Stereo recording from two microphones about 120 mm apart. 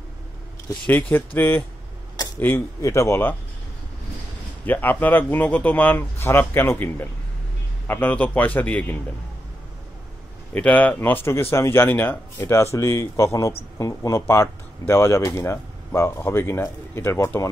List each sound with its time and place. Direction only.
0.8 s speech: 15° left (ahead or behind)
4.6 s speech: 15° left (ahead or behind)
10.5 s speech: 15° left (ahead or behind)